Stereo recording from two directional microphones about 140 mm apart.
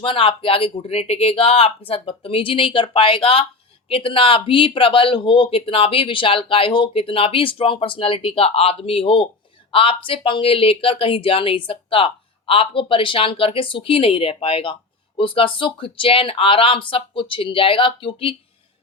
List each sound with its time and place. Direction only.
0.0 s speech: 40° left (ahead or behind)